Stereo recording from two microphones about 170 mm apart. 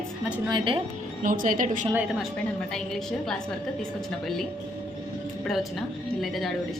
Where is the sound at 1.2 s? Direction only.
50° right (ahead or behind).